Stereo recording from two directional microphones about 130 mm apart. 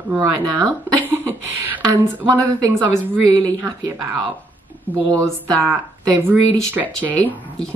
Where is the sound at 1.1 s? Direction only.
15° right (ahead or behind).